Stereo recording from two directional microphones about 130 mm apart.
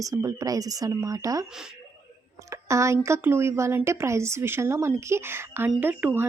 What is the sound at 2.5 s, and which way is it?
Speech, 25° right (ahead or behind).